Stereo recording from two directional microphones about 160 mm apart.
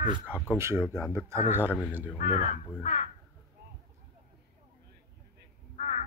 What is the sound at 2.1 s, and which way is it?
Speech, 45° left (ahead or behind).